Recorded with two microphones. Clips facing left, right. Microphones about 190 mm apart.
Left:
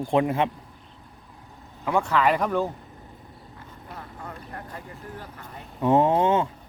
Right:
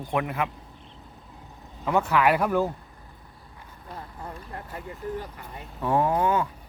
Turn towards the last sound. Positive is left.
turn(degrees=25)  # may be behind; listen again after turning